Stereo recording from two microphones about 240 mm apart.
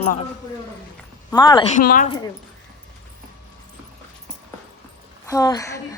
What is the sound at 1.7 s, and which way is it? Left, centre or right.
Speech, left.